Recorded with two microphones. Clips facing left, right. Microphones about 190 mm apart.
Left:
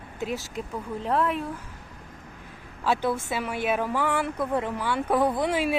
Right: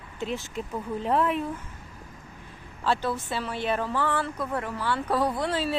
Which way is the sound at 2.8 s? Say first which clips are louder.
Left 2 dB; 10° left (ahead or behind).